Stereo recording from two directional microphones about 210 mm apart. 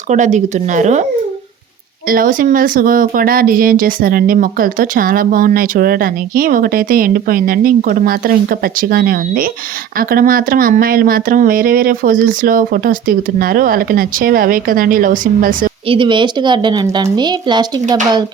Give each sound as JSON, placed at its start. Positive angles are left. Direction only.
{"t": 0.1, "sound": "speech", "side_deg": -35}
{"t": 2.0, "sound": "speech", "side_deg": -40}
{"t": 15.9, "sound": "a woman's voice", "side_deg": -25}